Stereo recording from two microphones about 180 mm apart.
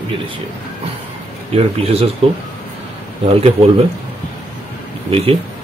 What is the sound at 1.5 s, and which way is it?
Speech, 35° right (ahead or behind).